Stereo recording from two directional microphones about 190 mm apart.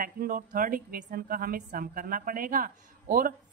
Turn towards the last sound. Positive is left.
turn(degrees=-45)  # may be behind; listen again after turning